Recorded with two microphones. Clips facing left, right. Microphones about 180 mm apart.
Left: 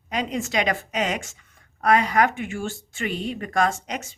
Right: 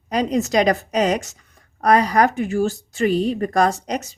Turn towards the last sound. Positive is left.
turn(degrees=-40)  # may be behind; listen again after turning